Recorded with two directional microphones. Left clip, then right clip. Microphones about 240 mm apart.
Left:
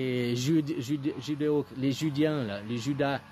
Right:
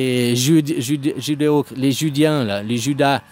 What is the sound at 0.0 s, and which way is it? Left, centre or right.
Speech, right.